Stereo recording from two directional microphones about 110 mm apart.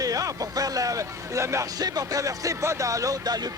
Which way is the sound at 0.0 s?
30° right (ahead or behind).